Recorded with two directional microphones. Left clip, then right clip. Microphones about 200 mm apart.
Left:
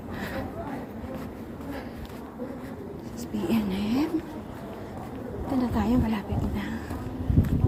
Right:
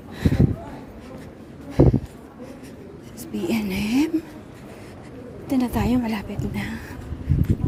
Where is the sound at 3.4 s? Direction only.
45° right (ahead or behind).